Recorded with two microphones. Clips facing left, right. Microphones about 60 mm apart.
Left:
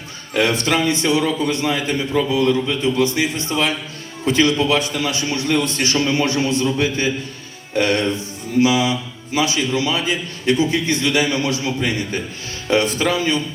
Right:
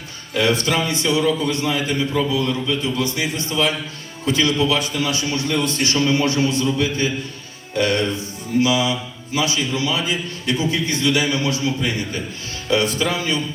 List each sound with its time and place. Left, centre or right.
0.3 s a man's voice: left